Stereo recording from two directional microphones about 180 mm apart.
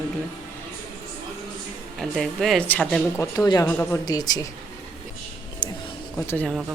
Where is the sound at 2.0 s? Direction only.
Centre (ahead or behind).